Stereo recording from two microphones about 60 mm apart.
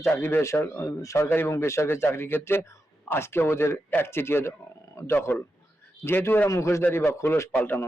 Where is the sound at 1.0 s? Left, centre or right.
Left.